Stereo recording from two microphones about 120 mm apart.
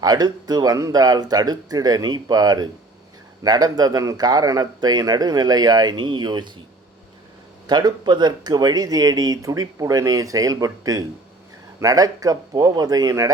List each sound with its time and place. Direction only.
0.0 s speech: 35° right (ahead or behind)
7.7 s speech: 35° right (ahead or behind)